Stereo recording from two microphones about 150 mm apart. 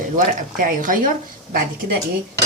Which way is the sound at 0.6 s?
60° right (ahead or behind).